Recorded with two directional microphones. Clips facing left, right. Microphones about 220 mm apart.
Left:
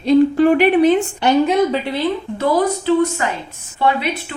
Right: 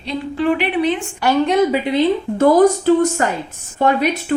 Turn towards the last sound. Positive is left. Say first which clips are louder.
# right 3 dB
turn(degrees=-45)  # may be behind; listen again after turning